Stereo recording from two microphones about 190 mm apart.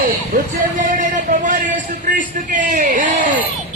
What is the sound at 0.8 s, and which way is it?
A man's voice, 45° right (ahead or behind).